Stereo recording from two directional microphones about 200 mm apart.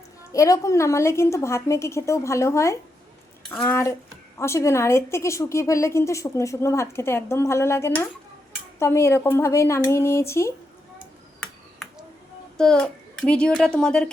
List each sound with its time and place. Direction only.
0.3 s a woman's voice: 15° left (ahead or behind)
12.5 s a child's voice: 5° left (ahead or behind)